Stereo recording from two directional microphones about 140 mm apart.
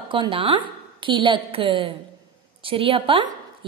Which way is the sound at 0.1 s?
40° right (ahead or behind).